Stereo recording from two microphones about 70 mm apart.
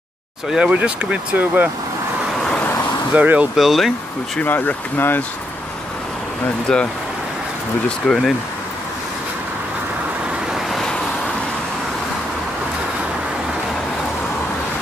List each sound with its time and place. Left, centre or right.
0.5 s speech: centre
3.2 s speech: centre
3.5 s speech: centre
4.5 s speech: left
6.7 s speech: centre
8.1 s speech: centre
10.5 s vehicle: centre